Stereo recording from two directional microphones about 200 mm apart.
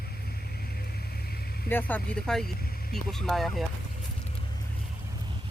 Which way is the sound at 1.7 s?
10° left (ahead or behind).